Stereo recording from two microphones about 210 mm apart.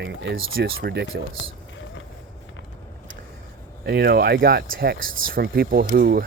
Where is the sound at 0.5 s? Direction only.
50° right (ahead or behind).